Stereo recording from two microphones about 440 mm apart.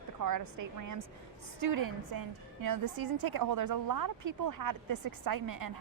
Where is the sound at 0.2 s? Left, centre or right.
Right.